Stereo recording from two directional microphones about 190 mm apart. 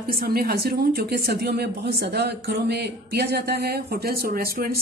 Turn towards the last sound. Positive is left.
turn(degrees=-50)  # may be behind; listen again after turning